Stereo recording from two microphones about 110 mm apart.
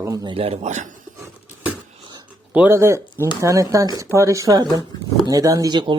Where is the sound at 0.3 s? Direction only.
65° right (ahead or behind); by 0.9 s 90° right.